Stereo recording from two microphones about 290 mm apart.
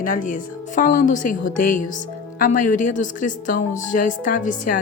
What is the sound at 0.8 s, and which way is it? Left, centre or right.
Speech, left.